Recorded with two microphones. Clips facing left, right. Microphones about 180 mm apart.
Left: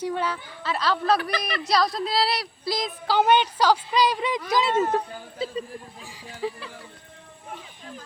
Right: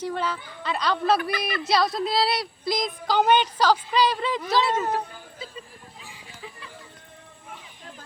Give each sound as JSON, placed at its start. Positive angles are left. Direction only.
{"t": 0.0, "sound": "a woman's voice", "side_deg": 10}
{"t": 6.4, "sound": "speech", "side_deg": 35}